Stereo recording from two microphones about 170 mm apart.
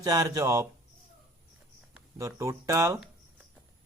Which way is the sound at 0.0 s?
20° right (ahead or behind).